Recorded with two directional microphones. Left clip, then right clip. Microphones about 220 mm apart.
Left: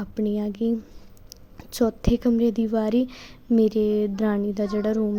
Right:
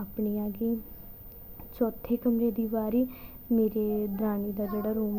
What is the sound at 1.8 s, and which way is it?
A woman's voice, 40° left (ahead or behind).